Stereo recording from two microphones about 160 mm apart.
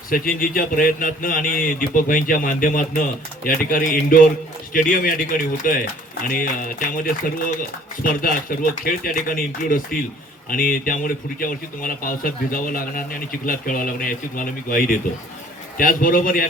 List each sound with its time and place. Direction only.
0.1 s a man's voice: 60° left (ahead or behind)